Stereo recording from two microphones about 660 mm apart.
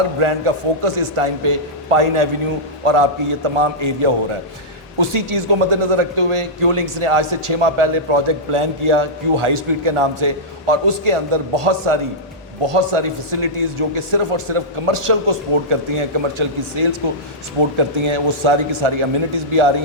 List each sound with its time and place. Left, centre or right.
0.2 s speech: right